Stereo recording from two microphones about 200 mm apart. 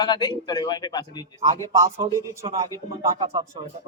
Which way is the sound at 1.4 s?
15° right (ahead or behind).